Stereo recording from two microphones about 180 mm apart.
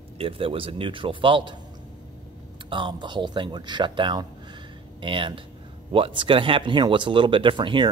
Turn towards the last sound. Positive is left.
turn(degrees=-25)  # may be behind; listen again after turning